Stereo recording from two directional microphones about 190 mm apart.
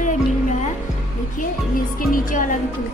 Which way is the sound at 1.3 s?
45° left (ahead or behind).